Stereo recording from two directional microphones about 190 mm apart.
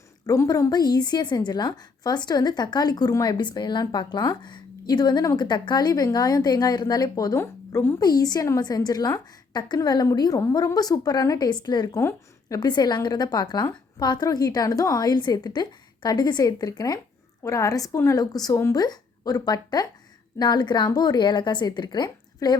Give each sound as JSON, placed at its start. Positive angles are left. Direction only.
{"t": 0.3, "sound": "a woman's voice", "side_deg": 20}